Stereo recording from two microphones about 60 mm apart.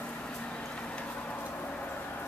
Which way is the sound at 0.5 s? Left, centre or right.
Centre.